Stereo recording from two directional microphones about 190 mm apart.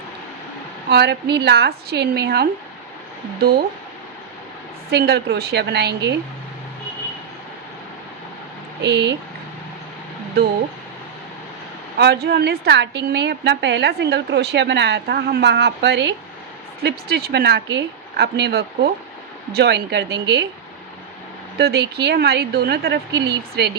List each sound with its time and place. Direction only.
0.9 s a woman's voice: 60° right (ahead or behind)
4.9 s a woman's voice: 60° right (ahead or behind)
8.8 s a woman's voice: 65° right (ahead or behind)
11.9 s a woman's voice: 60° right (ahead or behind)
21.6 s a woman's voice: 60° right (ahead or behind)